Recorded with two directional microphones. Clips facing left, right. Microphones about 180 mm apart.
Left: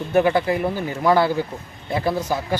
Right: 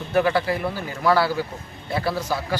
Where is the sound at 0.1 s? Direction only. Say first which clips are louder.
Left 3 dB; 20° left (ahead or behind).